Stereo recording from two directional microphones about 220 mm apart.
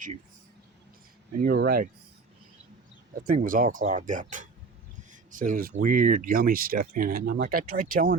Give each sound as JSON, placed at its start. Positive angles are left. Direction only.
{"t": 1.4, "sound": "speech", "side_deg": -45}
{"t": 3.2, "sound": "speech", "side_deg": -40}